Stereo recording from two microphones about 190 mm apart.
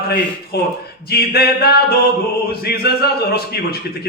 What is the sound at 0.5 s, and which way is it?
A man's voice, 60° left (ahead or behind).